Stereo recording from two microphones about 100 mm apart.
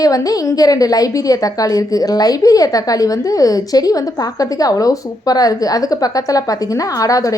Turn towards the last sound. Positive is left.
turn(degrees=35)  # may be behind; listen again after turning